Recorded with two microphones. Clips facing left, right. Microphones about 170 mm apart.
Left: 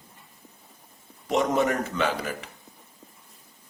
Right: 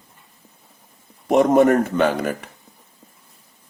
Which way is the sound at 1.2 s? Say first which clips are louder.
Right 9 dB; 50° right (ahead or behind).